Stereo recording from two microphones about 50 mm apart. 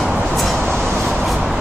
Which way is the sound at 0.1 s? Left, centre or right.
Right.